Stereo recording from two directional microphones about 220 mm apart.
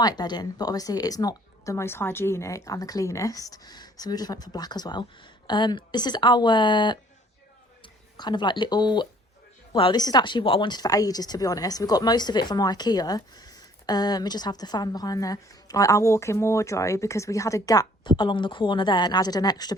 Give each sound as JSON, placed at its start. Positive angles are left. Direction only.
{"t": 0.0, "sound": "speech", "side_deg": 20}
{"t": 8.1, "sound": "speech", "side_deg": 20}